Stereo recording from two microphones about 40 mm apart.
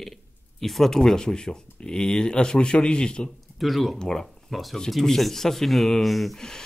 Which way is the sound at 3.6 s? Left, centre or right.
Centre.